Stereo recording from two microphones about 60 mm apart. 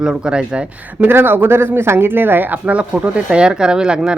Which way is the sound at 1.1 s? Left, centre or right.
Right.